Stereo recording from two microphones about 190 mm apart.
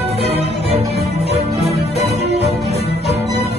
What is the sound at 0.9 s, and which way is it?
Music, 35° left (ahead or behind).